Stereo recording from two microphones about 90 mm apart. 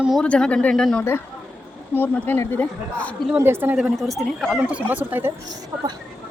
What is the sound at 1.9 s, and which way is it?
Speech, 25° left (ahead or behind).